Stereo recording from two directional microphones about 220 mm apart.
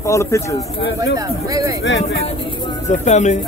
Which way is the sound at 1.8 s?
55° left (ahead or behind).